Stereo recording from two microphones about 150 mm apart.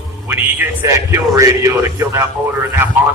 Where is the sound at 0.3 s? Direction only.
15° right (ahead or behind).